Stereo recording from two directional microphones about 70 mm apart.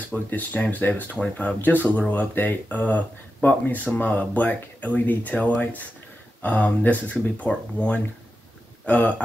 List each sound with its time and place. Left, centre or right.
0.1 s speech: left